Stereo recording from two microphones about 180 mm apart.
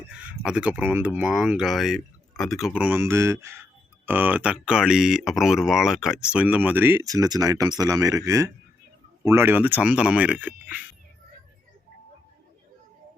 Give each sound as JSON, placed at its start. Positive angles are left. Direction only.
{"t": 0.2, "sound": "speech", "side_deg": -5}